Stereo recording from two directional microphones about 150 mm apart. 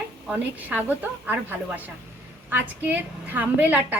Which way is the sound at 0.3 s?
10° right (ahead or behind).